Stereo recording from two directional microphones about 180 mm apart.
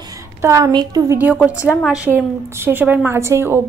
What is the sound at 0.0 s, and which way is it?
A woman's voice, 20° right (ahead or behind).